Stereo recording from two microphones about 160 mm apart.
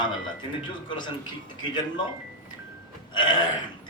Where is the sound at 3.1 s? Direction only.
25° left (ahead or behind).